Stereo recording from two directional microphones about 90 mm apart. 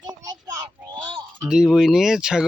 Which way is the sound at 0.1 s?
45° right (ahead or behind).